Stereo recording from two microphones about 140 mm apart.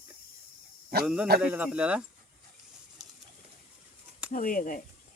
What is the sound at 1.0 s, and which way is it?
Speech, 5° right (ahead or behind).